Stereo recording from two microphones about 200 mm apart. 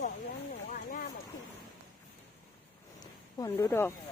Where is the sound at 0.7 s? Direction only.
45° left (ahead or behind).